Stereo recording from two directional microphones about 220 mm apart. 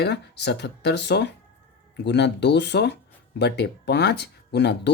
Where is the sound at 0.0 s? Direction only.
50° left (ahead or behind).